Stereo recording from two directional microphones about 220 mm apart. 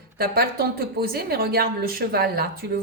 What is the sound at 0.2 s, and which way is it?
A woman's voice, 45° right (ahead or behind).